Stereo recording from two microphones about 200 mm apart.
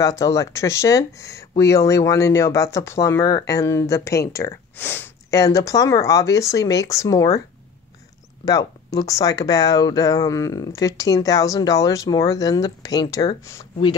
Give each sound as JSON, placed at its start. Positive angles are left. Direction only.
{"t": 0.0, "sound": "speech", "side_deg": 15}
{"t": 8.5, "sound": "speech", "side_deg": 20}